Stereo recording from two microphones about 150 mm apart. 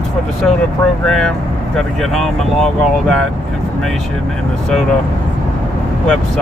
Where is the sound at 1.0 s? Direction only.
5° left (ahead or behind).